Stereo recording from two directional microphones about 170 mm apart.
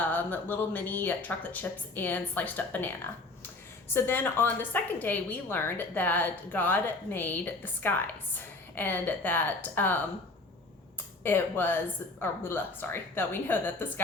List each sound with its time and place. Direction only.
0.0 s a woman's voice: 10° left (ahead or behind)
3.9 s a woman's voice: 15° left (ahead or behind)
11.2 s a woman's voice: 10° left (ahead or behind)